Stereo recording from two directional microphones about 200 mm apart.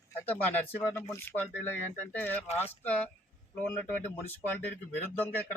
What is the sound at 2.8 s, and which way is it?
A man's voice, 10° left (ahead or behind).